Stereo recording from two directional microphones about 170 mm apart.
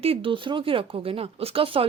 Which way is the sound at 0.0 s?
35° right (ahead or behind).